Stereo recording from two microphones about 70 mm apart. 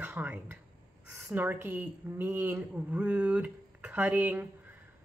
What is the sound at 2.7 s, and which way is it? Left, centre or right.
A woman's voice, right.